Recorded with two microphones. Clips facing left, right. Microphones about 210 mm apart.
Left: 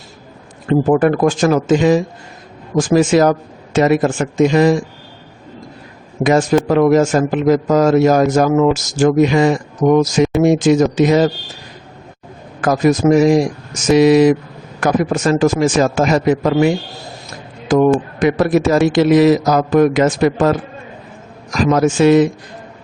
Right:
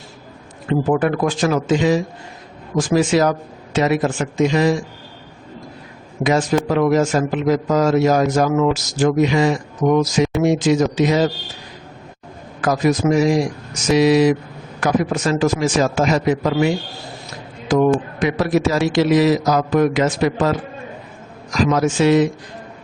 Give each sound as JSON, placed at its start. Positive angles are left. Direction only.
{"t": 0.7, "sound": "a man's voice", "side_deg": 45}
{"t": 6.2, "sound": "a man's voice", "side_deg": 50}
{"t": 12.6, "sound": "a man's voice", "side_deg": 50}
{"t": 21.5, "sound": "a man's voice", "side_deg": 50}